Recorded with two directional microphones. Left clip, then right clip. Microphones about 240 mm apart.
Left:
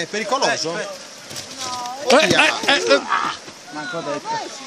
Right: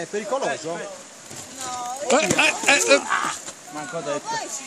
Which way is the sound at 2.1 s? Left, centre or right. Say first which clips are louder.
Left 5 dB; centre.